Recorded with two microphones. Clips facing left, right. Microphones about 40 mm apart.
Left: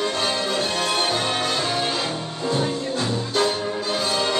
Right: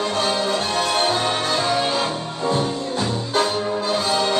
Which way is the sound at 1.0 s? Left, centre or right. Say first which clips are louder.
Right 2 dB; right.